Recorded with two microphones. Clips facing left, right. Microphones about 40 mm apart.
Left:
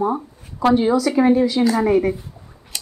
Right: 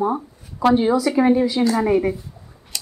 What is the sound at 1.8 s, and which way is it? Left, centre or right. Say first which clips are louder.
Speech: left 1 dB; centre.